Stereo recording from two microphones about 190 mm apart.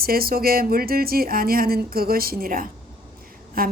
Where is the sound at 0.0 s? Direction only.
50° right (ahead or behind).